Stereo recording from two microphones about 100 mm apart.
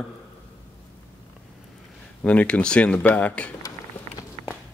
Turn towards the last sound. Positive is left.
turn(degrees=10)  # may be behind; listen again after turning